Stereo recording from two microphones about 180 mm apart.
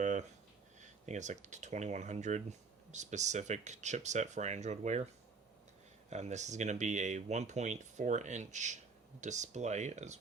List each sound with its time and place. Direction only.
0.0 s a sound: 40° right (ahead or behind)
0.8 s speech: 40° right (ahead or behind)
6.1 s speech: 40° right (ahead or behind)